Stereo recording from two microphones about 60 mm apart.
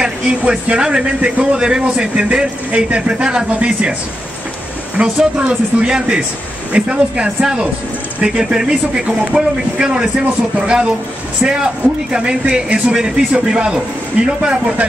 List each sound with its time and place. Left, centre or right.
0.0 s speech: centre
5.0 s speech: centre
11.4 s speech: centre